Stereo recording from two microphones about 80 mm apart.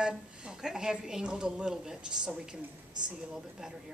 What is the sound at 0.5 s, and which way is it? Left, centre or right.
A woman's voice, centre.